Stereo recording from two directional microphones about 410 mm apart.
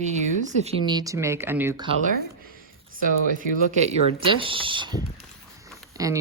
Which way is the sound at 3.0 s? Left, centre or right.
Centre.